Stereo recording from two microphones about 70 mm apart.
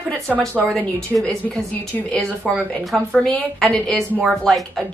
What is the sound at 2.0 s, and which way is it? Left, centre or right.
A woman's voice, centre.